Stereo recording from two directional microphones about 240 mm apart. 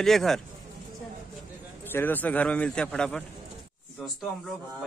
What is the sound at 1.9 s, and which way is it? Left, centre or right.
A man's voice, centre.